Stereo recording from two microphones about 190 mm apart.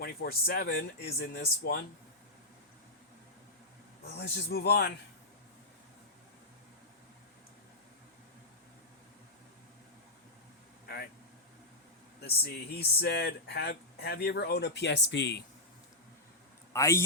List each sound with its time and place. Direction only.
0.0 s speech: 50° left (ahead or behind)
4.0 s speech: 60° left (ahead or behind)
10.8 s vehicle: 55° left (ahead or behind)
12.4 s speech: 55° left (ahead or behind)
16.7 s speech: 15° left (ahead or behind)